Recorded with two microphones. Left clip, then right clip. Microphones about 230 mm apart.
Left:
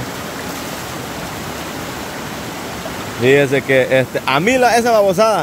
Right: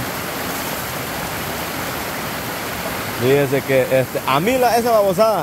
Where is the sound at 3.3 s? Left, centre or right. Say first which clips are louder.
Left 3 dB; centre.